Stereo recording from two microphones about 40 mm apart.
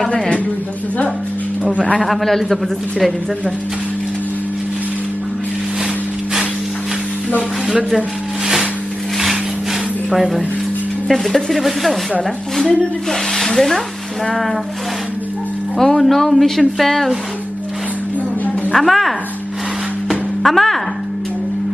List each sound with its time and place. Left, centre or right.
0.1 s a man's voice: left
2.0 s a woman's voice: centre
10.1 s a woman's voice: centre
13.1 s speech: centre
15.8 s a woman's voice: centre
18.7 s a woman's voice: centre
20.1 s music: centre